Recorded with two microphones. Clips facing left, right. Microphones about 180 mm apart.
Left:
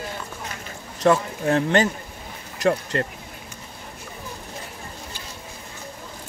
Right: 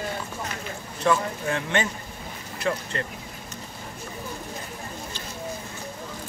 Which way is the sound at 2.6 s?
50° left (ahead or behind).